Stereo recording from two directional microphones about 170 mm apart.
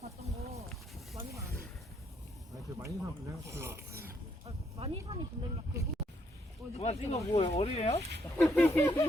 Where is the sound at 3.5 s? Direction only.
15° right (ahead or behind).